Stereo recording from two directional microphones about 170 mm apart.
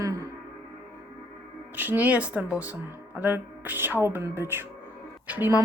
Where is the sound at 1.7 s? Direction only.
10° right (ahead or behind).